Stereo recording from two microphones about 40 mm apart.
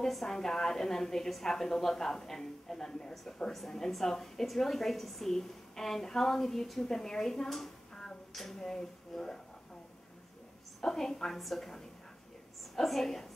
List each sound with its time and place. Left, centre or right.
0.1 s a woman's voice: centre
7.9 s a sound: centre
8.3 s speech: centre
8.5 s a woman's voice: centre
10.8 s a woman's voice: centre